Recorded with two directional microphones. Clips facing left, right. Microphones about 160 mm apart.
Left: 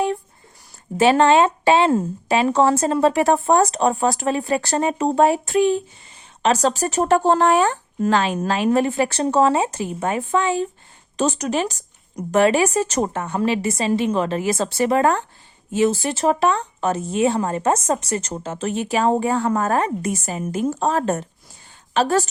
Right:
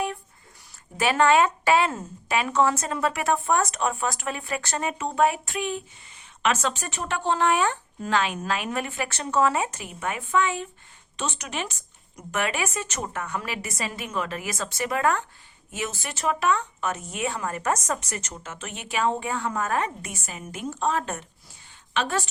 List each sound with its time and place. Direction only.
0.9 s speech: 30° left (ahead or behind)